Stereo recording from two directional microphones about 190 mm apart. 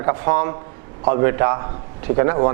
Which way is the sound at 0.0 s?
20° right (ahead or behind).